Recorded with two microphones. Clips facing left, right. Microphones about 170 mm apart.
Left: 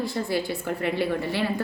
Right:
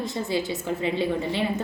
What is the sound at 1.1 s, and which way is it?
Speech, 20° right (ahead or behind).